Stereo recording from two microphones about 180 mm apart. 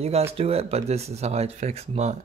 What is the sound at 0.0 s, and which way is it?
Speech, 35° right (ahead or behind).